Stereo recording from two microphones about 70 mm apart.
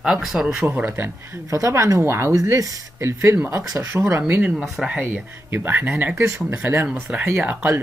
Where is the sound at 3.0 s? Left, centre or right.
Right.